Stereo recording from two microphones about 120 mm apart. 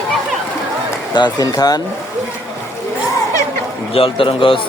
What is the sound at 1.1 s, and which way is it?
Speech, 35° left (ahead or behind).